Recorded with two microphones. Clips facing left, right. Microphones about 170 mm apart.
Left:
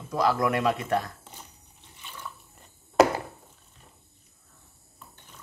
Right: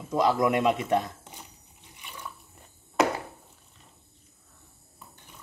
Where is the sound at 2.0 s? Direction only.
15° right (ahead or behind).